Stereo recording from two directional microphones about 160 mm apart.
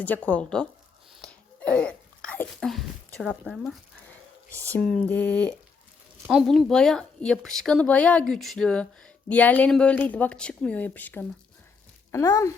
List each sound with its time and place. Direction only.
0.0 s speech: 10° left (ahead or behind)
6.2 s speech: centre (ahead or behind); by 12.5 s 20° left (ahead or behind)